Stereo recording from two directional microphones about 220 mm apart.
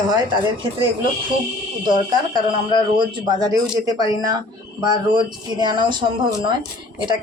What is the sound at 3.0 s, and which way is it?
Speech, 20° right (ahead or behind).